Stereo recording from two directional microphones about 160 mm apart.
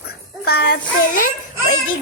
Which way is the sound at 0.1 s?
80° left.